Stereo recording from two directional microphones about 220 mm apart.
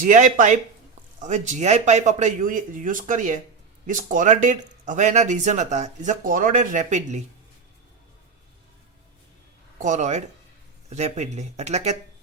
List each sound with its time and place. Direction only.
0.0 s speech: 35° right (ahead or behind)
9.7 s speech: 35° right (ahead or behind)